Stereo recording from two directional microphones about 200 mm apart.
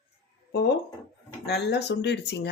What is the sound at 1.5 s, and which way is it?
Speech, 55° left (ahead or behind).